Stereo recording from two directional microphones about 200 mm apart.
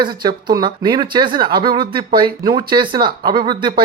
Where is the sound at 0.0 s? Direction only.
20° right (ahead or behind).